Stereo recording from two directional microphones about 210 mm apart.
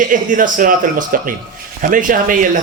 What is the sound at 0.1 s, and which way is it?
Speech, 40° right (ahead or behind).